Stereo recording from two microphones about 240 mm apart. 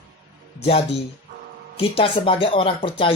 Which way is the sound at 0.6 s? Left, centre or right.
Left.